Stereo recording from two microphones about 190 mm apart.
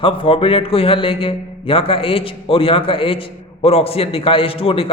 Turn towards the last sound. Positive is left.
turn(degrees=30)  # may be behind; listen again after turning